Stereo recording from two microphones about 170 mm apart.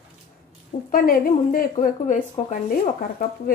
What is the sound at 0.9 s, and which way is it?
A woman's voice, 55° left (ahead or behind).